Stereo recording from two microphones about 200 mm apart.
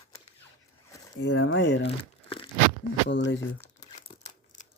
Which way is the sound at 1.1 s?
65° left (ahead or behind).